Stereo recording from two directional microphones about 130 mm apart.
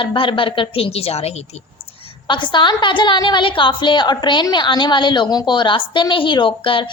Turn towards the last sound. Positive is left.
turn(degrees=40)  # may be behind; listen again after turning